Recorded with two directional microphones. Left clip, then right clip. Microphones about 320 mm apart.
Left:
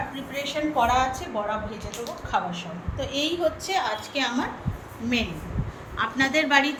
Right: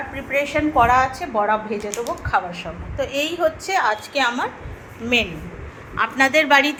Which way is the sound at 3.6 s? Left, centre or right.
Centre.